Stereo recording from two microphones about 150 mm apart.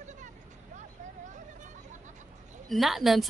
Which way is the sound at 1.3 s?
55° right (ahead or behind).